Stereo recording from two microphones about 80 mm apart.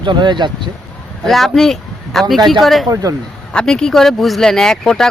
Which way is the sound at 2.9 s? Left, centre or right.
Right.